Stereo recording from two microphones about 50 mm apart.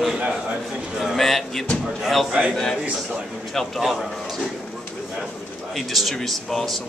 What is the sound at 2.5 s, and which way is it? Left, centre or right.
A man's voice, centre.